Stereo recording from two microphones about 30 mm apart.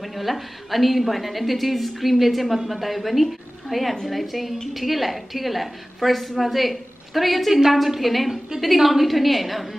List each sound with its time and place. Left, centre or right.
0.0 s a woman's voice: centre